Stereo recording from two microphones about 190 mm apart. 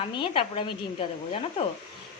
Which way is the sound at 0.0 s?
30° left (ahead or behind).